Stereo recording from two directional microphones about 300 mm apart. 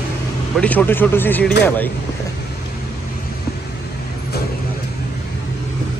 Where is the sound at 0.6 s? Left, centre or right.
Centre.